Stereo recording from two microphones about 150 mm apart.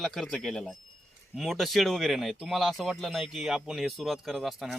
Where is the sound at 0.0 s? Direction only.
Centre (ahead or behind).